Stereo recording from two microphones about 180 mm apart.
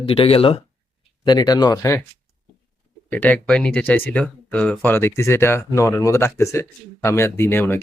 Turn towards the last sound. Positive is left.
turn(degrees=15)  # may be behind; listen again after turning